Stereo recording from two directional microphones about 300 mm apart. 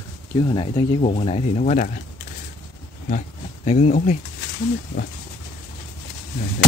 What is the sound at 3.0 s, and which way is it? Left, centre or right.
Speech, left.